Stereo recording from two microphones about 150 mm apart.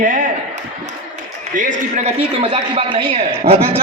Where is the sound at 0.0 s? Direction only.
65° right (ahead or behind).